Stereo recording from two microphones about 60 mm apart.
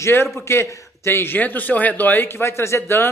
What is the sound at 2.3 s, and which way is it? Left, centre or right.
Speech, left.